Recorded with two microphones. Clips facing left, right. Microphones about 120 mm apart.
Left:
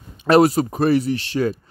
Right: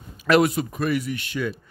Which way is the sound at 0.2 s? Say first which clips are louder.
Left 5 dB; 30° left (ahead or behind).